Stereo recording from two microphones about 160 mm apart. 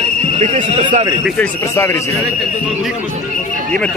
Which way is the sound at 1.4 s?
15° left (ahead or behind).